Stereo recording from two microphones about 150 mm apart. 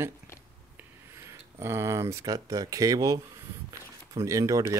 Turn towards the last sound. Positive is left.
turn(degrees=-20)  # may be behind; listen again after turning